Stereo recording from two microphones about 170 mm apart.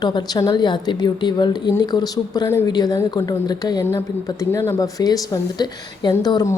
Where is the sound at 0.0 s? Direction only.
25° left (ahead or behind).